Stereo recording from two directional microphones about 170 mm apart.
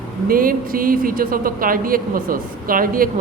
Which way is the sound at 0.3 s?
55° right (ahead or behind).